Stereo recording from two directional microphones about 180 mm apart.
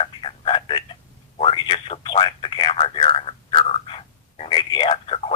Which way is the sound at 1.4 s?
30° left (ahead or behind).